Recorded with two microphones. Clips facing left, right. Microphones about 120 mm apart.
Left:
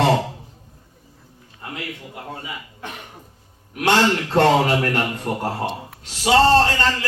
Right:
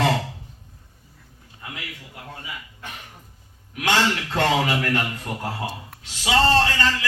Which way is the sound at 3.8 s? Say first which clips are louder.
Left 4 dB; 45° left (ahead or behind).